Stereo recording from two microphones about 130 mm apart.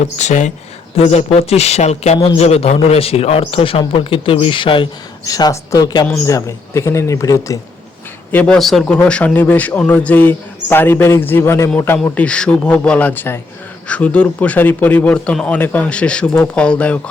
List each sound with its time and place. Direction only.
0.2 s speech: 65° left (ahead or behind)
0.9 s a man's voice: 55° left (ahead or behind)
5.3 s a man's voice: 25° left (ahead or behind)
8.3 s speech: 15° left (ahead or behind)
8.5 s a man's voice: centre (ahead or behind); by 11.7 s 20° left (ahead or behind)
12.0 s speech: 10° left (ahead or behind)